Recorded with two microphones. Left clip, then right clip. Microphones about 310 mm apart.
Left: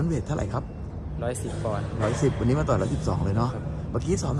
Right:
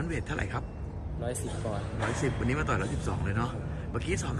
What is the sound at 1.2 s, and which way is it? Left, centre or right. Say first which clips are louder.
Speech: left 5 dB; centre.